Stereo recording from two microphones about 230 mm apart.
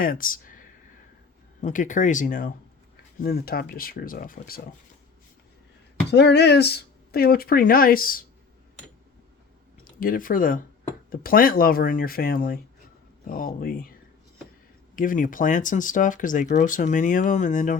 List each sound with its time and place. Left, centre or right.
0.0 s speech: left
1.6 s speech: left
6.1 s speech: left
10.0 s speech: left
14.9 s speech: left